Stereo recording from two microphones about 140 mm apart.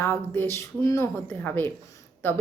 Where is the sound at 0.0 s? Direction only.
20° left (ahead or behind).